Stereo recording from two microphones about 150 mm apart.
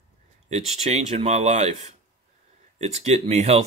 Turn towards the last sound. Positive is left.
turn(degrees=-45)  # may be behind; listen again after turning